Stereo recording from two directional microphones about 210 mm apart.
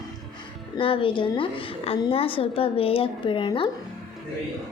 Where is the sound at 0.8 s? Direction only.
25° left (ahead or behind).